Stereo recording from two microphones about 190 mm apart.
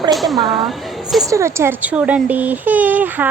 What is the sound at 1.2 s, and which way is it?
A child's voice, 15° right (ahead or behind).